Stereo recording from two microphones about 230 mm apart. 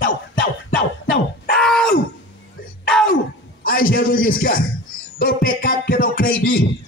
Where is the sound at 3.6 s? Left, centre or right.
Left.